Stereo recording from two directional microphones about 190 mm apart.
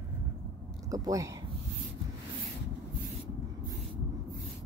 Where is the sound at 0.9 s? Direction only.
15° right (ahead or behind).